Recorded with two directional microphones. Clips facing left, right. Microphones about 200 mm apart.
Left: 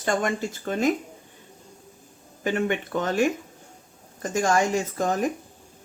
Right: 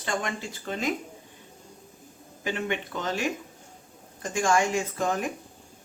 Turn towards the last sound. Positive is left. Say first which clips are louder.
# left 3 dB
turn(degrees=40)  # may be behind; listen again after turning